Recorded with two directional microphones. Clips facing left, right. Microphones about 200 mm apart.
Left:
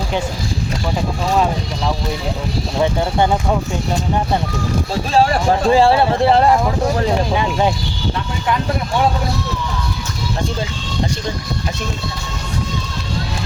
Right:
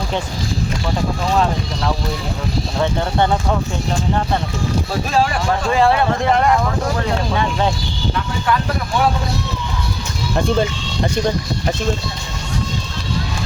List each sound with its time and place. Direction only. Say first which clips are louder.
2.8 s speech: left 2 dB; 10° left (ahead or behind)
5.1 s speech: left 4 dB; 35° left (ahead or behind)
7.1 s speech: left 2 dB; 15° left (ahead or behind)